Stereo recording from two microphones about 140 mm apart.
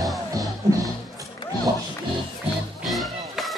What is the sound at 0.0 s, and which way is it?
Music, centre (ahead or behind).